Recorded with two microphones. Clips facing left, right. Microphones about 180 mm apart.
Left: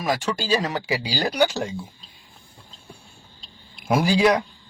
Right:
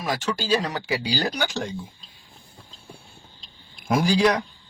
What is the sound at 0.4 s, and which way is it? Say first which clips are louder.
A man's voice: left 1 dB; 10° left (ahead or behind).